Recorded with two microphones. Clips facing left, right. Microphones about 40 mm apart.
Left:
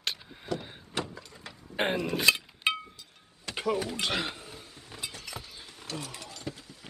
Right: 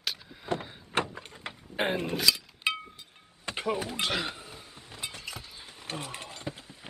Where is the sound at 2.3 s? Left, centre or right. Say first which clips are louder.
Left 4 dB; left.